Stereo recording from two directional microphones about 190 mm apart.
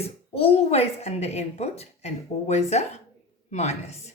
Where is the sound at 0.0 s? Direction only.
30° left (ahead or behind).